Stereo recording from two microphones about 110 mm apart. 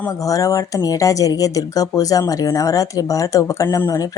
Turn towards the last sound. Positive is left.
turn(degrees=30)  # may be behind; listen again after turning